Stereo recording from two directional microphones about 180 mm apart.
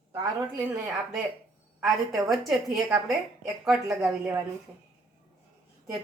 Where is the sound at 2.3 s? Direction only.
Centre (ahead or behind).